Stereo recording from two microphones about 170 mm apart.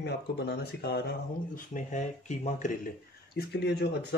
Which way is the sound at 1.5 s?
50° left (ahead or behind).